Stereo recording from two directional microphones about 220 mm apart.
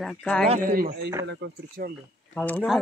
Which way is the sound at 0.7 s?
40° right (ahead or behind).